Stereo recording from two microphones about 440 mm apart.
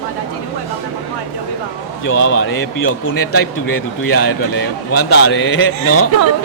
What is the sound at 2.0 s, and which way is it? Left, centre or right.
A man's voice, left.